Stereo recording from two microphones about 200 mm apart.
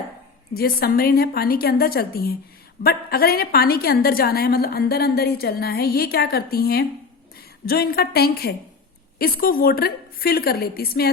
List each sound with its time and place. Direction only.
0.5 s a woman's voice: 50° left (ahead or behind)